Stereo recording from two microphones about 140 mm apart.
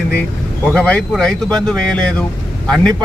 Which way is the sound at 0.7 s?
5° left (ahead or behind).